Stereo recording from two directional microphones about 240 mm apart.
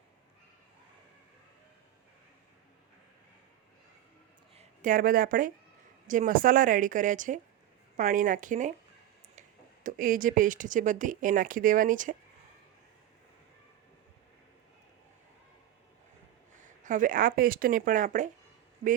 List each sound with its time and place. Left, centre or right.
4.5 s speech: right
9.8 s speech: right
16.6 s speech: right